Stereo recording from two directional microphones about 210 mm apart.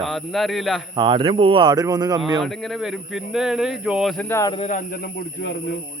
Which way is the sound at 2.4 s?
Centre (ahead or behind).